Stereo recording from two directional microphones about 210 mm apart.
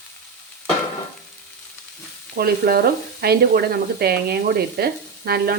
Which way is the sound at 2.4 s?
45° right (ahead or behind).